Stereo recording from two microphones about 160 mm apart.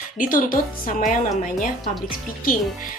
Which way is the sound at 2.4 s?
60° left (ahead or behind).